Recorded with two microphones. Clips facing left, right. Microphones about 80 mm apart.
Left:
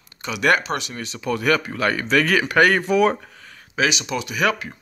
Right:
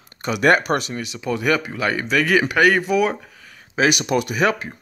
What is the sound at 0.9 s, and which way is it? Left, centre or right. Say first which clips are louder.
Speech: right 1 dB; centre.